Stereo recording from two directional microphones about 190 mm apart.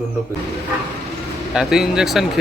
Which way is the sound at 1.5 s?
5° right (ahead or behind).